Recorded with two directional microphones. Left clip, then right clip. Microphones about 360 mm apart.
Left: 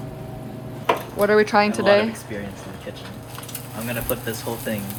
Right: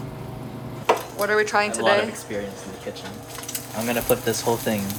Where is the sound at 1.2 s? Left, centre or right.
Centre.